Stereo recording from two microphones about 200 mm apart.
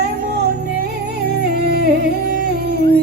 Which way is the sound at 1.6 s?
50° right (ahead or behind).